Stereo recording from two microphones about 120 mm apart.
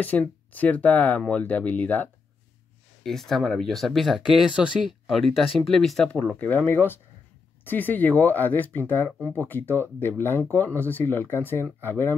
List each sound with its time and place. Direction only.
0.0 s speech: 15° left (ahead or behind)
3.0 s speech: 5° left (ahead or behind)